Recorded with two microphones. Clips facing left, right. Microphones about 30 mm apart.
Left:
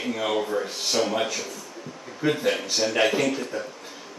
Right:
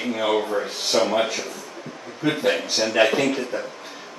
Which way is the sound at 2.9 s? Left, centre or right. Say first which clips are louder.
Right 4 dB; centre.